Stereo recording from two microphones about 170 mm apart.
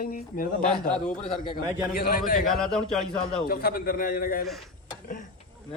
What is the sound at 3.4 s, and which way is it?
A man's voice, 60° left (ahead or behind).